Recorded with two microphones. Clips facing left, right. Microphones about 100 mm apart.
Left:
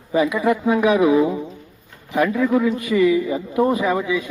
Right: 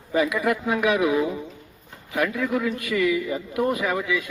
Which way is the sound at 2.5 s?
30° left (ahead or behind).